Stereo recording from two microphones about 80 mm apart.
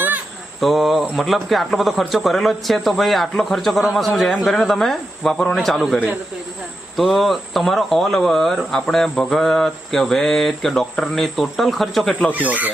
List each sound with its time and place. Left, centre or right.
0.6 s speech: centre
12.3 s speech: centre